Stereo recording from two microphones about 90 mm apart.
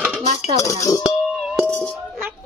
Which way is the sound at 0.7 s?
35° left (ahead or behind).